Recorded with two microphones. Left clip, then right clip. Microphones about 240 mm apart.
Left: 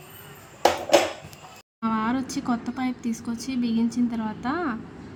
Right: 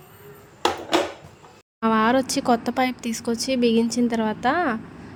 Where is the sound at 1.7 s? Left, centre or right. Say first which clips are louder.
Right 7 dB; centre.